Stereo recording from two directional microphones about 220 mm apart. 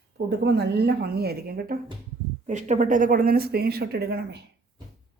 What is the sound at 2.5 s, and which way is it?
Speech, 30° right (ahead or behind).